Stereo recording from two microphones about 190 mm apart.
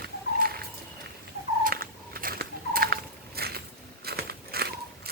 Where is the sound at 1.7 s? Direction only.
50° right (ahead or behind).